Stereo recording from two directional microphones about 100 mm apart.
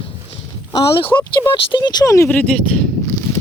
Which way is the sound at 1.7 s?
50° left (ahead or behind).